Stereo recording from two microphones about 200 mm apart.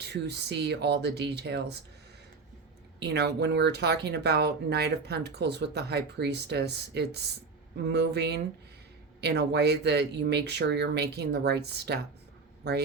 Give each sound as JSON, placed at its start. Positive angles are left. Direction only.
{"t": 0.0, "sound": "speech", "side_deg": -55}
{"t": 3.0, "sound": "speech", "side_deg": -55}